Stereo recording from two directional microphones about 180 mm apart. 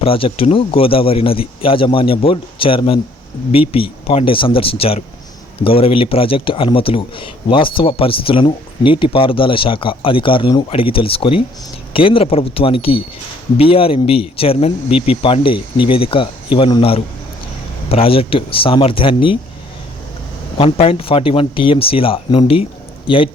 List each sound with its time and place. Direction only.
0.0 s speech: 30° left (ahead or behind)
20.6 s speech: 35° left (ahead or behind)